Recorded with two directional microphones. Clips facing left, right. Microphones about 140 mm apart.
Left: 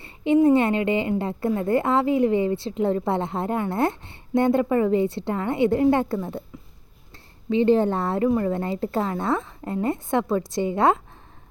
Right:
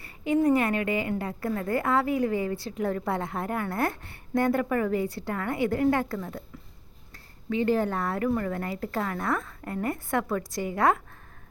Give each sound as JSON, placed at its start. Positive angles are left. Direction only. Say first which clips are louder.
{"t": 0.4, "sound": "a woman's voice", "louder": "left 5 dB", "side_deg": 25}
{"t": 7.5, "sound": "a woman's voice", "louder": "left 6 dB", "side_deg": 25}